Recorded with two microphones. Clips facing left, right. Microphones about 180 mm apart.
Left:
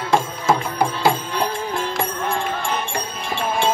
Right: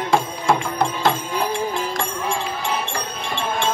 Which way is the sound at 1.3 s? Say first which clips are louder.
Right 1 dB; 5° right (ahead or behind).